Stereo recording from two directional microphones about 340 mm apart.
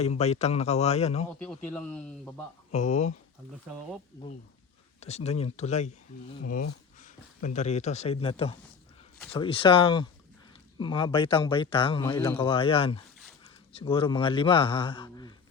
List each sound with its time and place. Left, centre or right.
0.0 s speech: centre
1.4 s speech: centre
2.7 s speech: centre
4.9 s speech: centre
7.0 s a man's voice: left